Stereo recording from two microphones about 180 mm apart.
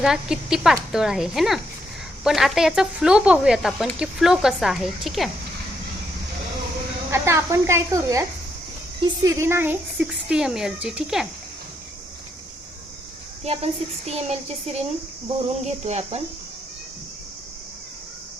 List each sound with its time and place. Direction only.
0.0 s speech: 5° right (ahead or behind)
7.1 s a woman's voice: 15° right (ahead or behind)
13.4 s a woman's voice: 35° right (ahead or behind)